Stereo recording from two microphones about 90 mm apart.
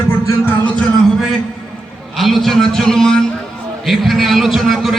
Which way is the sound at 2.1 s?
Centre (ahead or behind).